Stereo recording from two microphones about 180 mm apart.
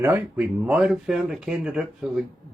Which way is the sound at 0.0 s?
10° right (ahead or behind).